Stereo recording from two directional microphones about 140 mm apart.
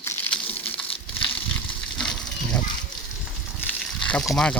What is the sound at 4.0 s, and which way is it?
Speech, 5° left (ahead or behind).